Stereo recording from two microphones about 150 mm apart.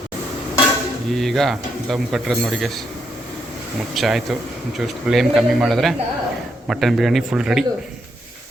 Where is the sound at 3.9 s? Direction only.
Centre (ahead or behind).